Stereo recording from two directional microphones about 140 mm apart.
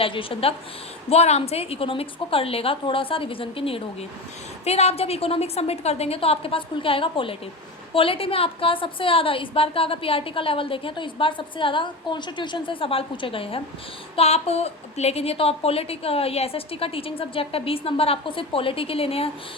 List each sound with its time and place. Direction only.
0.0 s a woman's voice: 40° left (ahead or behind)